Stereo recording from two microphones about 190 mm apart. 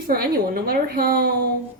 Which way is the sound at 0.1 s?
50° right (ahead or behind).